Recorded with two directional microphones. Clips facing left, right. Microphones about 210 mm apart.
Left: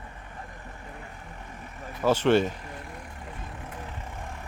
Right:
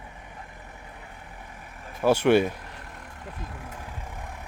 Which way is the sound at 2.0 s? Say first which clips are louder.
Right 2 dB; 10° right (ahead or behind).